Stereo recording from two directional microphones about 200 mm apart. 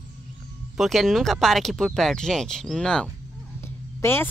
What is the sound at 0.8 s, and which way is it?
Speech, centre (ahead or behind).